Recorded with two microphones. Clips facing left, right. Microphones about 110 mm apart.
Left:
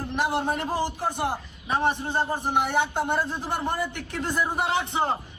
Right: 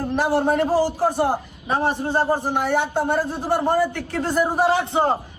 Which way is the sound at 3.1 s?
50° right (ahead or behind).